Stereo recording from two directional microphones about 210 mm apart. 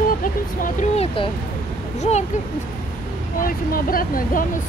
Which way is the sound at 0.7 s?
25° left (ahead or behind).